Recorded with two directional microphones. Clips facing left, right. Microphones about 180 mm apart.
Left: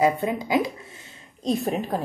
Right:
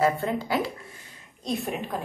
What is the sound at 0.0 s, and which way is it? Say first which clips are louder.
Speech: left 2 dB; 15° left (ahead or behind).